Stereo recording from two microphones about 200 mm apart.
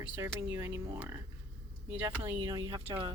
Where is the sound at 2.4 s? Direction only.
15° right (ahead or behind).